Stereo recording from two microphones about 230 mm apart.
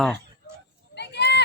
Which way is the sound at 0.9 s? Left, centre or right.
Left.